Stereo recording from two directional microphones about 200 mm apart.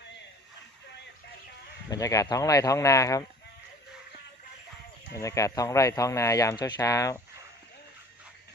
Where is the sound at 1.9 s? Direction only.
15° left (ahead or behind).